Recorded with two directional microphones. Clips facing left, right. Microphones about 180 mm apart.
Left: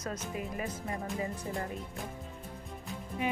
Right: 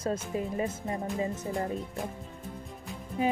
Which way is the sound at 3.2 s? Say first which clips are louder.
Right 6 dB; 35° right (ahead or behind).